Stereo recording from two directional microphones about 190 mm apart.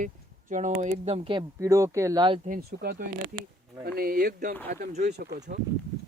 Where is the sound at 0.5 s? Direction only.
40° right (ahead or behind); by 2.4 s 25° right (ahead or behind).